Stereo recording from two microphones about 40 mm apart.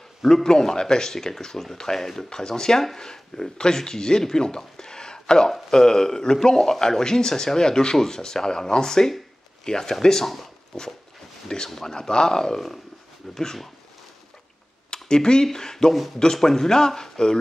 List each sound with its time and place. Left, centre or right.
0.2 s speech: centre
11.4 s speech: centre
14.9 s a sound: centre
15.4 s speech: centre